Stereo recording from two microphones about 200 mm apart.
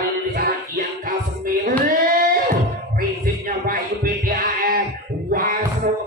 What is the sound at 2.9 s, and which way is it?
Music, 45° right (ahead or behind).